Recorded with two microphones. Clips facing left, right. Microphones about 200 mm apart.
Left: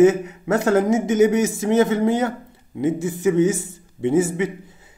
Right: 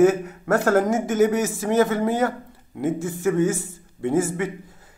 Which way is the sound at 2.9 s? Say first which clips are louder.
Left 3 dB; 75° left (ahead or behind).